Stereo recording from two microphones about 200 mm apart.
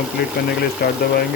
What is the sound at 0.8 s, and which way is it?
Speech, 50° left (ahead or behind).